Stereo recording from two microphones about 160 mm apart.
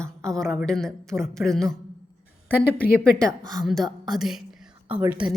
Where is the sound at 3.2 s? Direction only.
25° right (ahead or behind).